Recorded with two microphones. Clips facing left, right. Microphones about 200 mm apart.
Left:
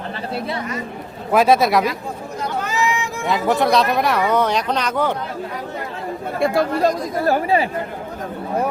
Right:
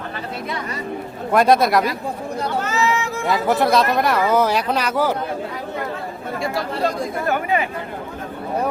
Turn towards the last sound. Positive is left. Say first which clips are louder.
# left 3 dB
turn(degrees=35)  # may be behind; listen again after turning